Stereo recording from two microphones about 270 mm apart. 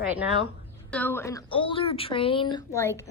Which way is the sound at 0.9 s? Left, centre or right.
Centre.